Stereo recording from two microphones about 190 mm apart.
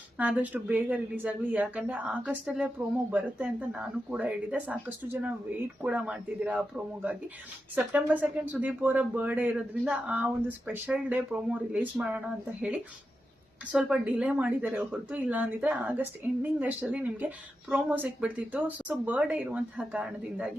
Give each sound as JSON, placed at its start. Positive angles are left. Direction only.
{"t": 0.2, "sound": "a woman's voice", "side_deg": -5}